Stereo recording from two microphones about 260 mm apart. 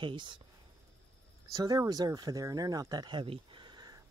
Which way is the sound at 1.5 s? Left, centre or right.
Centre.